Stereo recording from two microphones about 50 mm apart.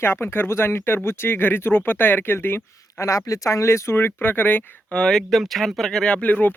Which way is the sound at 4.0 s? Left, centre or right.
Left.